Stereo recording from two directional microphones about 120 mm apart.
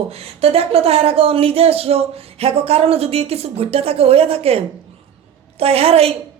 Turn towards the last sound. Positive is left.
turn(degrees=-55)  # may be behind; listen again after turning